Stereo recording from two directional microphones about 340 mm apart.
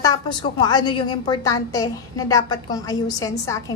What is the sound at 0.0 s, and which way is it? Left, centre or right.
A woman's voice, centre.